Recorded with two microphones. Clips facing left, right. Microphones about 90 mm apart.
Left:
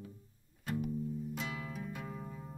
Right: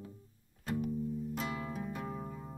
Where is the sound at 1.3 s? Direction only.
35° right (ahead or behind).